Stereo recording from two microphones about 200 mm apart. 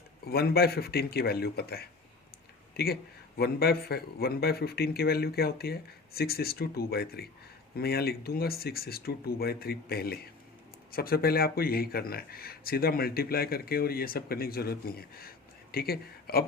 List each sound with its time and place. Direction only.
0.3 s a man's voice: 50° left (ahead or behind)